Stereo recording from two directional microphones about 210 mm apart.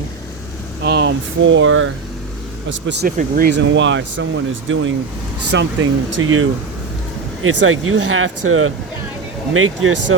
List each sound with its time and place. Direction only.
0.8 s speech: 55° right (ahead or behind)
2.8 s speech: 55° right (ahead or behind)
3.2 s speech: 45° right (ahead or behind)
6.2 s speech: 85° right